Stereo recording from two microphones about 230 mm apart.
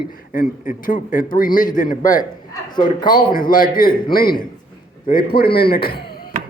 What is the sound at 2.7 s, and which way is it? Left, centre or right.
Speech, centre.